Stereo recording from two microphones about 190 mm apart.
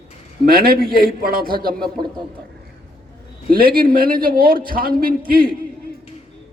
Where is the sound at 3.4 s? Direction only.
50° right (ahead or behind).